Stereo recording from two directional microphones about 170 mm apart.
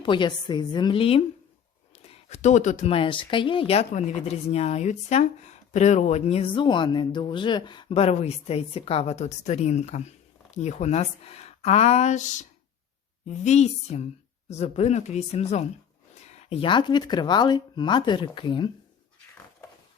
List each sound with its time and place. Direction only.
0.0 s speech: 25° left (ahead or behind)